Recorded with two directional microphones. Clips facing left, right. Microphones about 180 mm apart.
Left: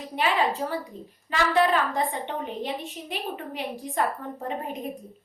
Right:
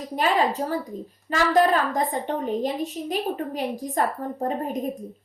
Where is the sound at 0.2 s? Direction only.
40° right (ahead or behind).